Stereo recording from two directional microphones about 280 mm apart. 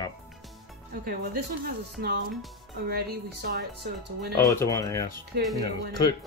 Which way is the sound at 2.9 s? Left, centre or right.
Right.